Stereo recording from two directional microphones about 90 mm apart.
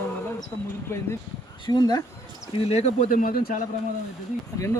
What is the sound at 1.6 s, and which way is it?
Speech, 55° left (ahead or behind).